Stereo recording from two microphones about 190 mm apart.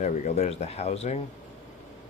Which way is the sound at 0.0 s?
40° left (ahead or behind).